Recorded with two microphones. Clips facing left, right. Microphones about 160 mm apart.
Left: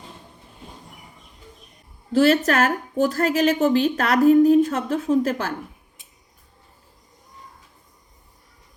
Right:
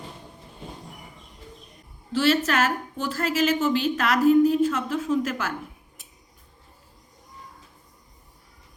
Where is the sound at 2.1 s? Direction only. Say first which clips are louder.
Left 5 dB; 45° left (ahead or behind).